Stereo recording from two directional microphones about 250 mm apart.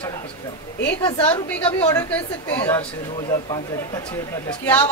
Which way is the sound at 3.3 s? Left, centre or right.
Centre.